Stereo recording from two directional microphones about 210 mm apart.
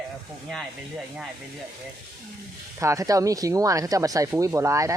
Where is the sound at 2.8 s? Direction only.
15° right (ahead or behind).